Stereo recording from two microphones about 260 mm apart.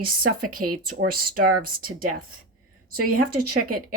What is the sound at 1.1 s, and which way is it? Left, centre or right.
Speech, right.